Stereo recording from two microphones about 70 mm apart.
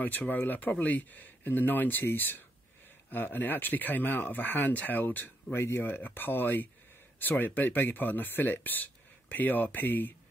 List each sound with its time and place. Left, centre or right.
0.3 s speech: left